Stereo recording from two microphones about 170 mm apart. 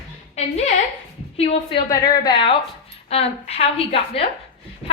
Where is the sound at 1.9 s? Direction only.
25° left (ahead or behind).